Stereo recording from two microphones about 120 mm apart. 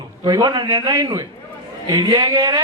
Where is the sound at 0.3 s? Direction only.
35° right (ahead or behind).